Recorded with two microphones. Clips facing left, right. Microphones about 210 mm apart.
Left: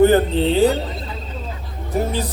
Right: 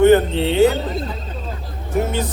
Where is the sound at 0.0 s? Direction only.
35° left (ahead or behind).